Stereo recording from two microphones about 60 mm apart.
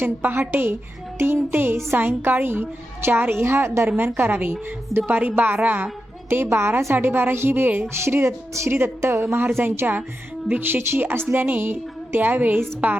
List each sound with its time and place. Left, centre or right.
0.0 s a woman's voice: right
3.8 s a woman's voice: right
6.2 s a woman's voice: right